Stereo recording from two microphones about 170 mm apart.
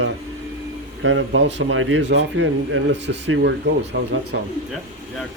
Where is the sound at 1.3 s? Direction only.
90° right.